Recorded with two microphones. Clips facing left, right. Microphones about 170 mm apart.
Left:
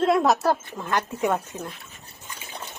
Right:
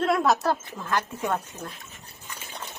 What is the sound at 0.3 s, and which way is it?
Speech, centre (ahead or behind).